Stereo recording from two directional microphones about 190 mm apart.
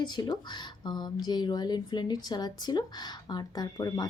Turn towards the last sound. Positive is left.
turn(degrees=20)  # may be behind; listen again after turning